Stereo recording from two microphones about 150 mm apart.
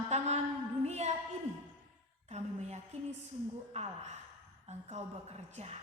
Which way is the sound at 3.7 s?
45° right (ahead or behind).